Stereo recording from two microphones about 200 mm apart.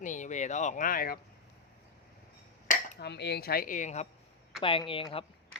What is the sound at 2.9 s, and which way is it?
Speech, 55° left (ahead or behind).